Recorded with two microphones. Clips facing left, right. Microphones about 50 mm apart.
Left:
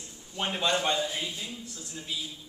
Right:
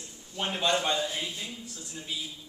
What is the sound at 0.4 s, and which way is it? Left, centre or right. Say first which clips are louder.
Speech: even; centre.